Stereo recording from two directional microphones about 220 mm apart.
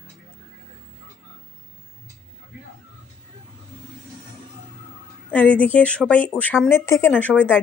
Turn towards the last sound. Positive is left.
turn(degrees=10)  # may be behind; listen again after turning